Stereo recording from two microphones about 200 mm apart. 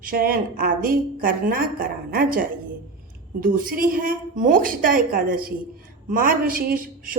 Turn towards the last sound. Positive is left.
turn(degrees=-45)  # may be behind; listen again after turning